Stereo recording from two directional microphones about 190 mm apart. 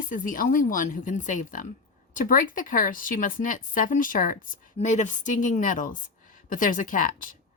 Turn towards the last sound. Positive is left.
turn(degrees=45)  # may be behind; listen again after turning